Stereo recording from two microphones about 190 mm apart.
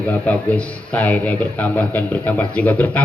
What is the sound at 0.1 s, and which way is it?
A man's voice, 5° left (ahead or behind).